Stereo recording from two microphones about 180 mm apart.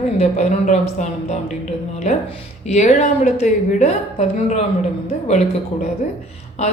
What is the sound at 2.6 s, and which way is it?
A woman's voice, 40° left (ahead or behind).